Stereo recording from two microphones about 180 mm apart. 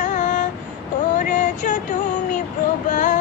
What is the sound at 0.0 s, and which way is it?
Child singing, 45° left (ahead or behind).